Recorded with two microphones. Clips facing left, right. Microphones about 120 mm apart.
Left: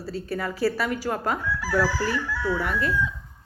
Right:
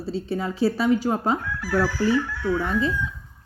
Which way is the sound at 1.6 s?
90° left.